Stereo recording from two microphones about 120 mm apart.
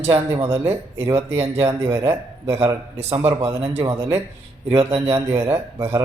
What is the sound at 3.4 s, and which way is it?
Speech, 55° right (ahead or behind).